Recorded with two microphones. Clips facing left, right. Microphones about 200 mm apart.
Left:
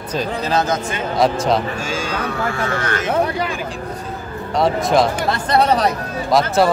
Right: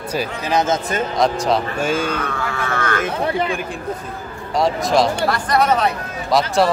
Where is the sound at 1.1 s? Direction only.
5° left (ahead or behind).